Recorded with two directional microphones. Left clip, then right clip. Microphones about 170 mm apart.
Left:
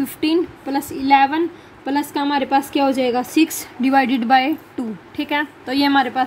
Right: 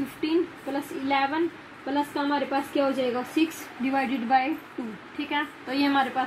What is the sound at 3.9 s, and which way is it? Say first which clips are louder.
Speech: left 9 dB; 75° left (ahead or behind).